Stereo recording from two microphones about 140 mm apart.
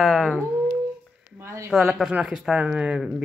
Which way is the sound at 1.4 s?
20° right (ahead or behind).